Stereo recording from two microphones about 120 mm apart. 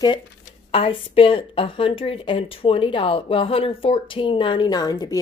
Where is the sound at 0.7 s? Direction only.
50° left (ahead or behind).